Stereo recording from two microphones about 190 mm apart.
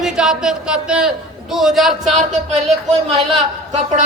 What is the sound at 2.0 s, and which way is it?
Speech, 40° right (ahead or behind).